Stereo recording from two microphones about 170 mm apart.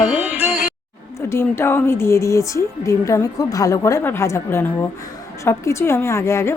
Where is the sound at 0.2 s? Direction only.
15° right (ahead or behind).